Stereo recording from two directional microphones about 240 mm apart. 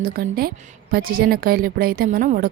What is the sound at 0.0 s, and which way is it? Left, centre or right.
A woman's voice, right.